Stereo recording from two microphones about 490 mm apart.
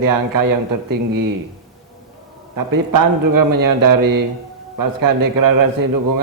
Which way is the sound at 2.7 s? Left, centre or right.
Right.